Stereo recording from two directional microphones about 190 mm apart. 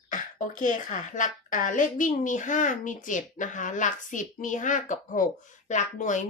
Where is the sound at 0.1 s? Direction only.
45° left (ahead or behind).